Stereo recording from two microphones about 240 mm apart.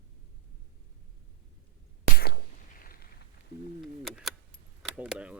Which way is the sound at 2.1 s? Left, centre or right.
Left.